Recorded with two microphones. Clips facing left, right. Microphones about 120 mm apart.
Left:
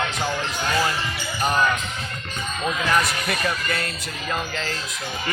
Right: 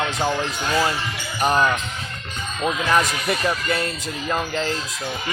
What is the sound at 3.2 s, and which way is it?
Speech, 20° right (ahead or behind).